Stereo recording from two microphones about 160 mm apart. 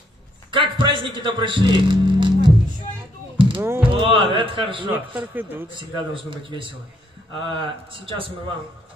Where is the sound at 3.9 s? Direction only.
30° right (ahead or behind).